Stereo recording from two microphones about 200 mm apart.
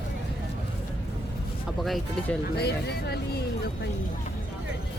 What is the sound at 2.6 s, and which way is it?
Speech, 55° left (ahead or behind).